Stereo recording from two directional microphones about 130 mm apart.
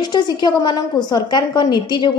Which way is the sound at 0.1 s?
30° left (ahead or behind).